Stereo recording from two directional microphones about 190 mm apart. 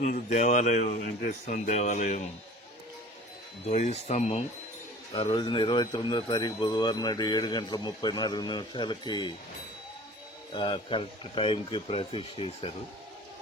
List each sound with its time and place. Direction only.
0.0 s speech: 40° left (ahead or behind)
3.7 s speech: 35° left (ahead or behind)
5.1 s speech: 25° left (ahead or behind)
10.5 s speech: 25° left (ahead or behind)